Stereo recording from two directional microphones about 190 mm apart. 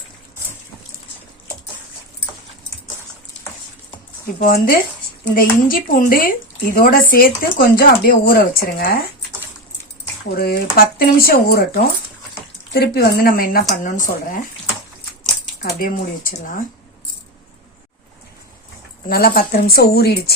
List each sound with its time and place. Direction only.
4.4 s speech: 50° left (ahead or behind)
10.2 s speech: 55° left (ahead or behind)
15.6 s speech: 45° left (ahead or behind)
19.0 s speech: 50° left (ahead or behind)